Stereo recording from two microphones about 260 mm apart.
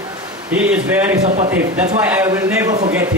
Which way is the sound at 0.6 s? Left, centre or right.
Centre.